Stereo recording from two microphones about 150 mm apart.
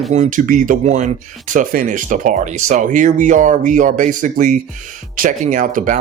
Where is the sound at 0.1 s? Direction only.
55° right (ahead or behind).